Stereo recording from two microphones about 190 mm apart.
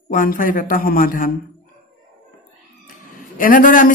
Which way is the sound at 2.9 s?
45° left (ahead or behind).